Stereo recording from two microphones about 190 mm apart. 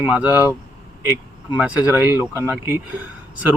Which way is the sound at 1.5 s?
5° right (ahead or behind).